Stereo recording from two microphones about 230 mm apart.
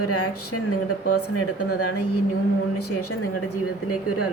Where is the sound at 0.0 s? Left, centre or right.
Left.